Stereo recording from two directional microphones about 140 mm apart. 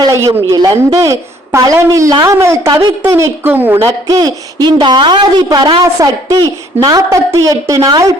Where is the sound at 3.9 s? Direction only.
25° right (ahead or behind).